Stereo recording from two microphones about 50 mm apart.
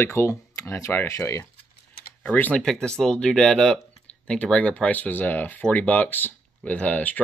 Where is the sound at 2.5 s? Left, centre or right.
Centre.